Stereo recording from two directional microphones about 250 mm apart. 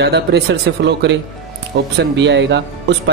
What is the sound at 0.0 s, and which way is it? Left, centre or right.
Speech, right.